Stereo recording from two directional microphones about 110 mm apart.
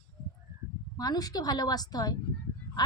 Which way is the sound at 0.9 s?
35° left (ahead or behind).